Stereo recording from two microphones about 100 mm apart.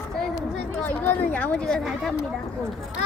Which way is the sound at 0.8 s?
15° left (ahead or behind).